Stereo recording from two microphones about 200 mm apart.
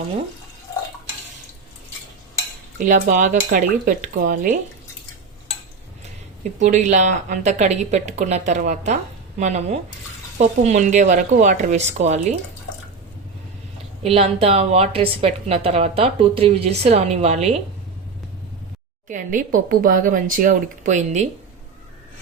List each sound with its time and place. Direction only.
2.7 s a woman's voice: 40° right (ahead or behind)
6.6 s a woman's voice: 35° right (ahead or behind)
14.0 s a woman's voice: 30° right (ahead or behind)
19.0 s a woman's voice: 40° right (ahead or behind)